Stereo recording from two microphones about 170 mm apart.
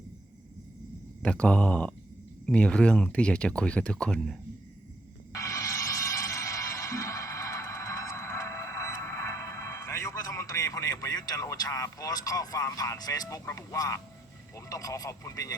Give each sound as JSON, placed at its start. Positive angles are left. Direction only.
{"t": 1.2, "sound": "speech", "side_deg": 5}
{"t": 5.3, "sound": "music", "side_deg": 20}
{"t": 14.5, "sound": "speech", "side_deg": 20}